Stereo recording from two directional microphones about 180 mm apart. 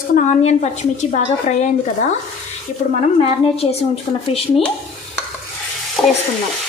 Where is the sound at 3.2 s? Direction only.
35° left (ahead or behind).